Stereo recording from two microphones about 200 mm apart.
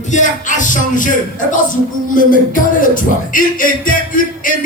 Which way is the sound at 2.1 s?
40° left (ahead or behind).